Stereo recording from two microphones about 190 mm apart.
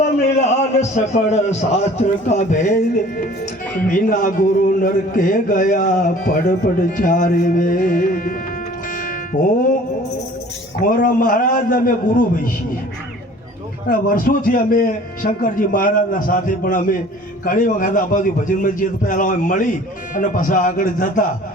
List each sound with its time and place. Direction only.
0.3 s a man's voice: 35° left (ahead or behind)
3.8 s speech: 45° left (ahead or behind)
9.0 s music: 45° left (ahead or behind)
10.8 s speech: 45° left (ahead or behind)
13.8 s speech: 50° left (ahead or behind)